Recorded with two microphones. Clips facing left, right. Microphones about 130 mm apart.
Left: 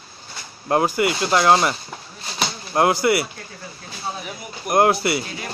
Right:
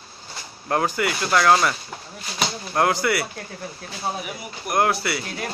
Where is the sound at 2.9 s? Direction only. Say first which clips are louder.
Left 4 dB; 15° left (ahead or behind).